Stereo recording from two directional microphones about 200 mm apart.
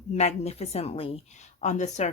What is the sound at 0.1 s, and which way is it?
A woman's voice, 35° left (ahead or behind).